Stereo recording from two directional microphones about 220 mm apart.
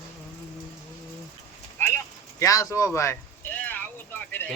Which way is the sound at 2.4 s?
15° left (ahead or behind).